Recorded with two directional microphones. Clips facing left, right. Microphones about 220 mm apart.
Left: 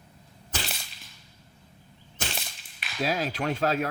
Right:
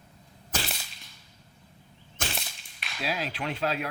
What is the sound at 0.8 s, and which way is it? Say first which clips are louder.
Whip: even; centre (ahead or behind).